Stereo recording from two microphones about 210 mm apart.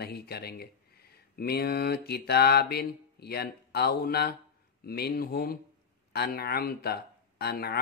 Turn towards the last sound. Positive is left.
turn(degrees=50)  # may be behind; listen again after turning